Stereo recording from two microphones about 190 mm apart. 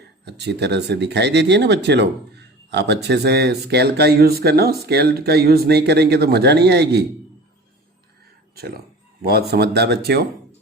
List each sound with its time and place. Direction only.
0.3 s speech: 60° right (ahead or behind)
9.2 s speech: 55° right (ahead or behind)